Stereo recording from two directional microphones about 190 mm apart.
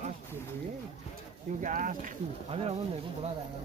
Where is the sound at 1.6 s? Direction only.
45° right (ahead or behind).